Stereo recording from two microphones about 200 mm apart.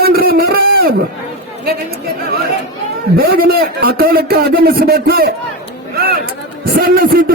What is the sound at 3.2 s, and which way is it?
A man's voice, 50° right (ahead or behind).